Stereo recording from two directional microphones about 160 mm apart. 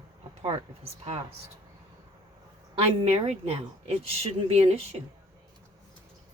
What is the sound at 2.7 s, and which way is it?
Speech, 40° right (ahead or behind).